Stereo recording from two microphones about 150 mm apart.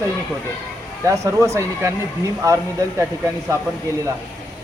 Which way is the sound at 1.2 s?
20° right (ahead or behind).